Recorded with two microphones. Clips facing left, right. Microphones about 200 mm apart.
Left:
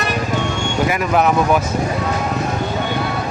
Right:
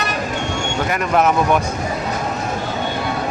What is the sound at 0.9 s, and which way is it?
Speech, centre (ahead or behind).